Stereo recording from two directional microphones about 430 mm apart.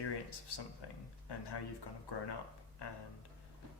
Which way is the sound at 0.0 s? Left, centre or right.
Left.